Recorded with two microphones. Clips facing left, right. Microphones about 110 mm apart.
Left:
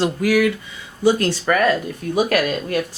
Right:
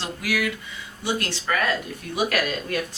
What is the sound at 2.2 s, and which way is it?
Speech, 40° left (ahead or behind).